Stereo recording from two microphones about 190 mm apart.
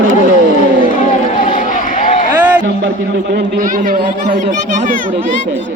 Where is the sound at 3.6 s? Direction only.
45° right (ahead or behind).